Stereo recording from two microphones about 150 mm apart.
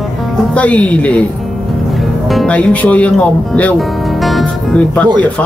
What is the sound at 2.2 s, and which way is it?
Speech, 5° left (ahead or behind).